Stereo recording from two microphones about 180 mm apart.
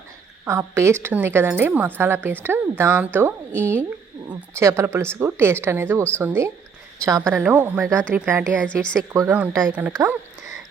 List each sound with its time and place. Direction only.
0.4 s a woman's voice: 15° right (ahead or behind)
7.3 s a woman's voice: 10° right (ahead or behind)
8.6 s speech: 5° left (ahead or behind)
9.1 s a woman's voice: 15° right (ahead or behind)